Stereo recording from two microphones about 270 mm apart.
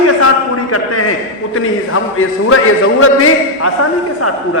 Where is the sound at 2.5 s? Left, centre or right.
Left.